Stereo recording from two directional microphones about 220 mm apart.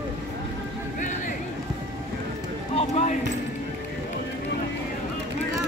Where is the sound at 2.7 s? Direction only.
30° left (ahead or behind).